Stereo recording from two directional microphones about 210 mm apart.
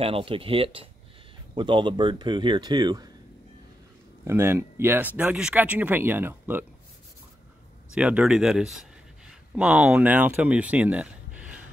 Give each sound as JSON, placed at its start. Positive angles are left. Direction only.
{"t": 0.0, "sound": "speech", "side_deg": -25}
{"t": 4.2, "sound": "speech", "side_deg": -10}
{"t": 7.9, "sound": "speech", "side_deg": -5}